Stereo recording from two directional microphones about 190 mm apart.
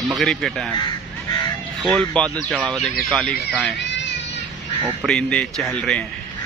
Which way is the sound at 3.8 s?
70° left (ahead or behind).